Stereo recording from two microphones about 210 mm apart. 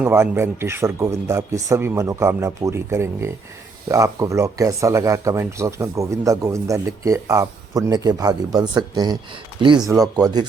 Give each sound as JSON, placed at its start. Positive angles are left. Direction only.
{"t": 0.0, "sound": "speech", "side_deg": -10}